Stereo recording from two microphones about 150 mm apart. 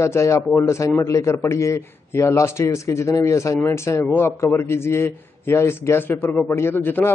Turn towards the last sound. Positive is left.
turn(degrees=15)  # may be behind; listen again after turning